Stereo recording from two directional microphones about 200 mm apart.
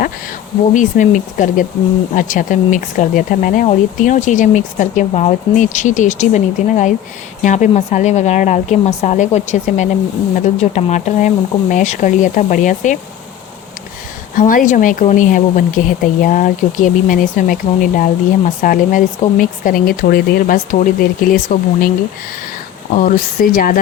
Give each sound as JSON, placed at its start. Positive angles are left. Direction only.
{"t": 0.7, "sound": "speech", "side_deg": 40}
{"t": 14.3, "sound": "speech", "side_deg": 40}
{"t": 23.0, "sound": "speech", "side_deg": 40}